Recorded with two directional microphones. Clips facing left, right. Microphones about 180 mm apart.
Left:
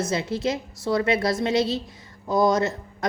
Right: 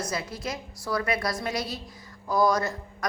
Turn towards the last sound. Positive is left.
turn(degrees=25)  # may be behind; listen again after turning